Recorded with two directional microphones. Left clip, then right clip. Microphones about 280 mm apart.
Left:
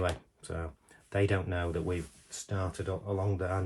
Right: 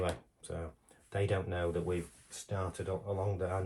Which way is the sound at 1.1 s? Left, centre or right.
Left.